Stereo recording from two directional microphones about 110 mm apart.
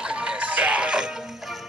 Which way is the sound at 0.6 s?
10° right (ahead or behind).